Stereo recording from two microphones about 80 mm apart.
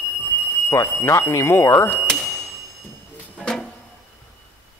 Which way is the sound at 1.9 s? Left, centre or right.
Centre.